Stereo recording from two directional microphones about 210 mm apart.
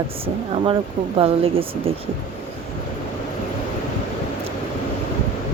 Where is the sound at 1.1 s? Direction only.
25° right (ahead or behind).